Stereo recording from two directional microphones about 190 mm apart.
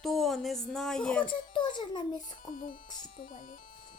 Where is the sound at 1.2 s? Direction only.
25° left (ahead or behind).